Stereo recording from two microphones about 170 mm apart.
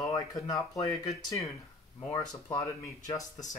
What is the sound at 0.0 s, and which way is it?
Speech, 20° left (ahead or behind).